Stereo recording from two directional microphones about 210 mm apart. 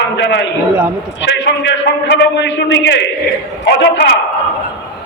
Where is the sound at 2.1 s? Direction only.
55° left (ahead or behind).